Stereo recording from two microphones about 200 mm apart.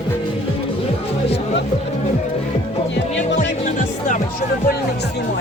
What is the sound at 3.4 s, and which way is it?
Music, 40° left (ahead or behind).